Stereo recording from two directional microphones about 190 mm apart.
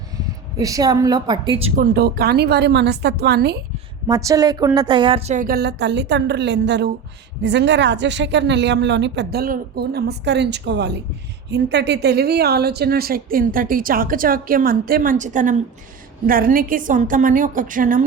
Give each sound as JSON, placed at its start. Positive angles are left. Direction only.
{"t": 0.5, "sound": "a woman's voice", "side_deg": -20}
{"t": 1.7, "sound": "a woman's voice", "side_deg": -50}
{"t": 4.0, "sound": "a woman's voice", "side_deg": -20}